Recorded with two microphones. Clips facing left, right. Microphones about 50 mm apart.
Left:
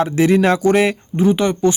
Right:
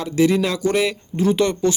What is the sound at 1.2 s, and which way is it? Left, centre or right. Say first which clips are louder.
Speech: left 2 dB; centre.